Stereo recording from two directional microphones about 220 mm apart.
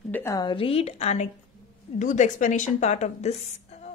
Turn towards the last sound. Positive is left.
turn(degrees=30)  # may be behind; listen again after turning